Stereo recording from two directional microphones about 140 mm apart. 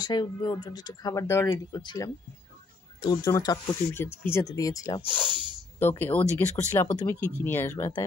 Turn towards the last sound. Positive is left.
turn(degrees=15)  # may be behind; listen again after turning